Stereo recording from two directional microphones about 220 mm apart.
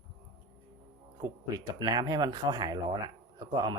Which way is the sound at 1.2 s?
20° right (ahead or behind).